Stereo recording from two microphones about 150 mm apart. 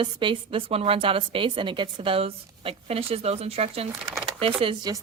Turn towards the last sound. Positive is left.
turn(degrees=-30)  # may be behind; listen again after turning